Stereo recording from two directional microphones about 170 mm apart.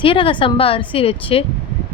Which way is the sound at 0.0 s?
30° left (ahead or behind).